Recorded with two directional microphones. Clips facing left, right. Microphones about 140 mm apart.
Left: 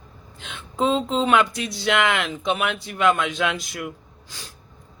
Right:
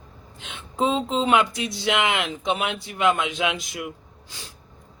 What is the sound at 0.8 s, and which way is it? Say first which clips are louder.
Speech: left 1 dB; 20° right (ahead or behind).